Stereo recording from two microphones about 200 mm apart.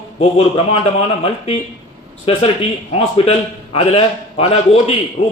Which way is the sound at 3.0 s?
30° left (ahead or behind).